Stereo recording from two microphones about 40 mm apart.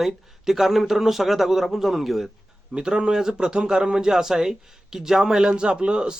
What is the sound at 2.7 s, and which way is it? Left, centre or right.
A man's voice, right.